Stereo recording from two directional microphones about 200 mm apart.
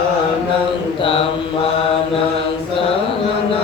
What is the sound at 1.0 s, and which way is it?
Mantra, 25° left (ahead or behind).